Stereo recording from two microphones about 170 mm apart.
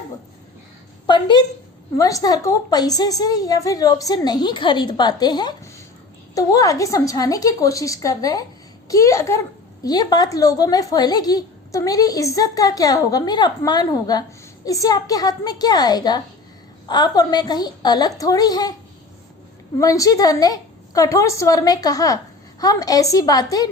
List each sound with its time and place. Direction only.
1.0 s a woman's voice: 25° left (ahead or behind)
19.8 s a woman's voice: 20° left (ahead or behind)